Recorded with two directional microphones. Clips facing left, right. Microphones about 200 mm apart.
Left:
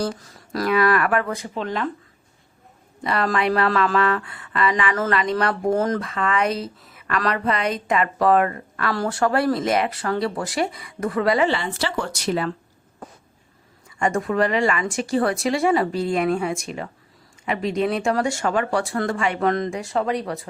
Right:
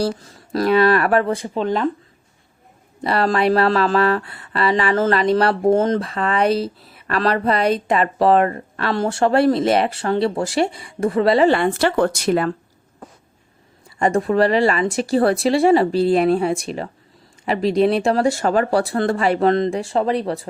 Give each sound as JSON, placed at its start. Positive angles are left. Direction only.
{"t": 0.0, "sound": "speech", "side_deg": -25}
{"t": 3.0, "sound": "speech", "side_deg": -35}
{"t": 11.4, "sound": "speech", "side_deg": -55}
{"t": 14.0, "sound": "speech", "side_deg": -35}